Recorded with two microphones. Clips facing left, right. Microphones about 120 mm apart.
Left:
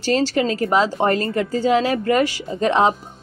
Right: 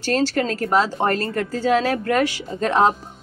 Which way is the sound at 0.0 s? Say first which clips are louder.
Left 2 dB; 15° left (ahead or behind).